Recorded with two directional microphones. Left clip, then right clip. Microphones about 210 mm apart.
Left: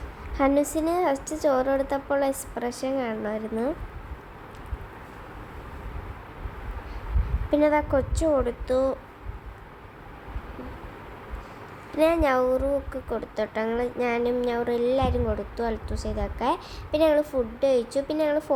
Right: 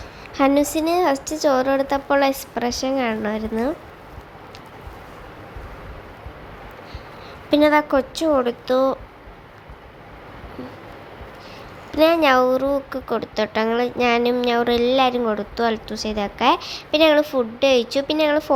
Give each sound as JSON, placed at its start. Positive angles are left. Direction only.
{"t": 0.3, "sound": "a woman's voice", "side_deg": -15}
{"t": 7.5, "sound": "a woman's voice", "side_deg": -20}
{"t": 11.9, "sound": "a woman's voice", "side_deg": -15}